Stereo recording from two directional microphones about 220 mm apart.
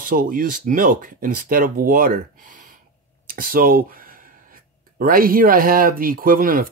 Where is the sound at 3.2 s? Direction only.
40° right (ahead or behind).